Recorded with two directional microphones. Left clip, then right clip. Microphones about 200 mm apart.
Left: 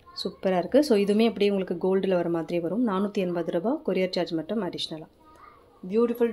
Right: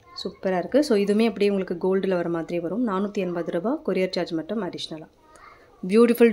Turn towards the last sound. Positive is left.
turn(degrees=-45)  # may be behind; listen again after turning